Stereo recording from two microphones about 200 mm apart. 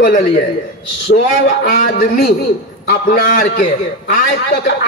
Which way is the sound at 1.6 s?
45° left (ahead or behind).